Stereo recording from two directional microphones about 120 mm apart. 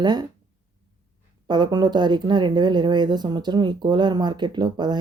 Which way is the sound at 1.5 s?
35° right (ahead or behind).